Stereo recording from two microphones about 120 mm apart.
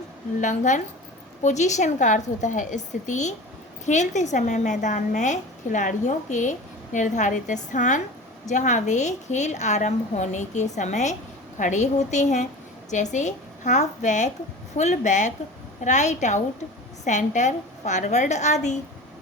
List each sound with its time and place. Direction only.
0.3 s a woman's voice: 90° left
1.4 s a woman's voice: 80° left